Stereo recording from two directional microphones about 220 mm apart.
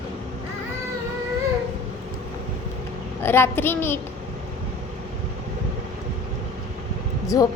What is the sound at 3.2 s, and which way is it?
Speech, 10° left (ahead or behind).